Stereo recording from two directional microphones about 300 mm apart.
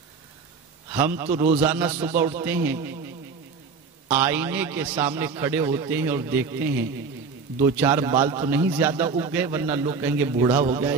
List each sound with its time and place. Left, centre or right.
0.9 s a man's voice: centre
4.1 s a man's voice: centre
10.6 s a man's voice: right